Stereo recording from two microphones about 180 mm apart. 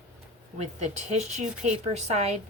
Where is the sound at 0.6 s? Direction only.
40° right (ahead or behind).